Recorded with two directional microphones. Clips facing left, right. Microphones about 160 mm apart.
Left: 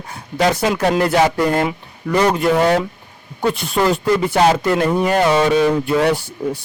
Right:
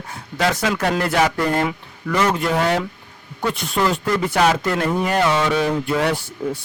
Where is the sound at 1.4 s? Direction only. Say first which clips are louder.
Left 3 dB; 20° left (ahead or behind).